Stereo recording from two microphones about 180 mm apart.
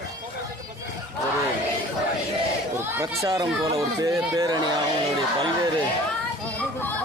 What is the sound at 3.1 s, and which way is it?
Speech, 20° right (ahead or behind).